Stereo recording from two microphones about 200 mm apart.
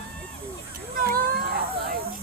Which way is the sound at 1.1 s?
50° right (ahead or behind).